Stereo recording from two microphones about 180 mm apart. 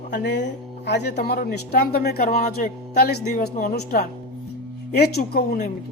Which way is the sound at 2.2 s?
45° left (ahead or behind).